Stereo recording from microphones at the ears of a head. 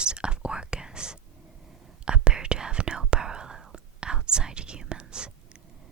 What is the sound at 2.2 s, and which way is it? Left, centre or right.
Whispering, right.